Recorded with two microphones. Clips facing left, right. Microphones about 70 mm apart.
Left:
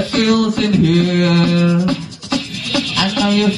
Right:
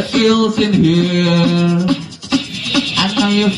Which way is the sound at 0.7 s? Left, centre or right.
Left.